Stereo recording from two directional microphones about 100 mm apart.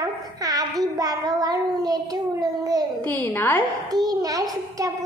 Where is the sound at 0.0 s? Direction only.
35° right (ahead or behind).